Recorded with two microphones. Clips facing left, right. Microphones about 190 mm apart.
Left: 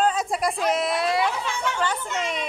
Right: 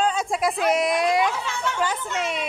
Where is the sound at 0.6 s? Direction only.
15° right (ahead or behind).